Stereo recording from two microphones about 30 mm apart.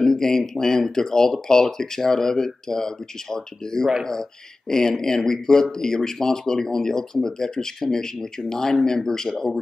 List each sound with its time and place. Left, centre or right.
0.0 s speech: centre